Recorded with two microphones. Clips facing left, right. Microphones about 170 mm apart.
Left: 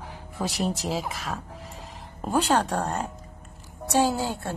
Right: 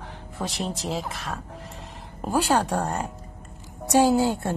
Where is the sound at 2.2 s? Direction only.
5° right (ahead or behind).